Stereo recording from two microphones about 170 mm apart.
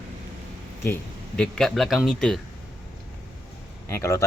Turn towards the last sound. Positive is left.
turn(degrees=15)  # may be behind; listen again after turning